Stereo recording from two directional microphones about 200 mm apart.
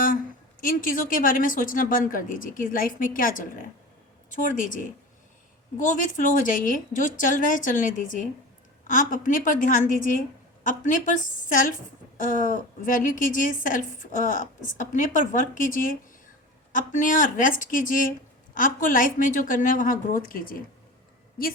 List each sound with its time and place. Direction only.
0.6 s a woman's voice: 45° left (ahead or behind)